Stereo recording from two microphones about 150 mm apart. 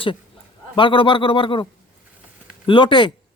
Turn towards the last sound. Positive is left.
turn(degrees=30)  # may be behind; listen again after turning